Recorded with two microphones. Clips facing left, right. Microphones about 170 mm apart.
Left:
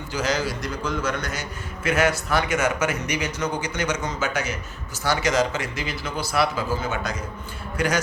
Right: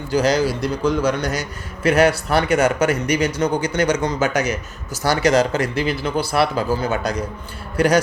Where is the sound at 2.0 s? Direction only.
65° right (ahead or behind).